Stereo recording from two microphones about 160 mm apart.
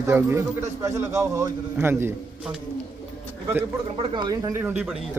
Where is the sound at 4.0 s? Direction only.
30° right (ahead or behind); by 5.2 s 5° right (ahead or behind).